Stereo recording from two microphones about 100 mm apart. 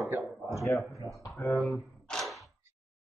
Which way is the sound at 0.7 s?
Centre (ahead or behind).